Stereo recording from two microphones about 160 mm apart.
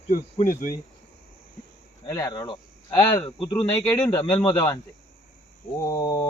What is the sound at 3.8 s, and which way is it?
Speech, 10° left (ahead or behind).